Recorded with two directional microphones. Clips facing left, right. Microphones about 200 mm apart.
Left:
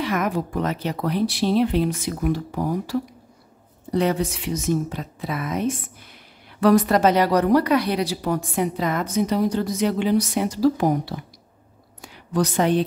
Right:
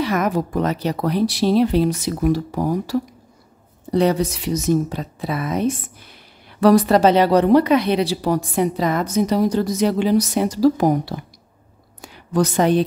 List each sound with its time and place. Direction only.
0.0 s speech: 40° right (ahead or behind)
11.1 s speech: 55° right (ahead or behind)
12.0 s a sound: 40° right (ahead or behind)